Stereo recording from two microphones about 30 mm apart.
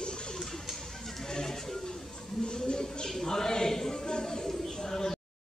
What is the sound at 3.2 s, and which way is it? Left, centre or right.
Choir, left.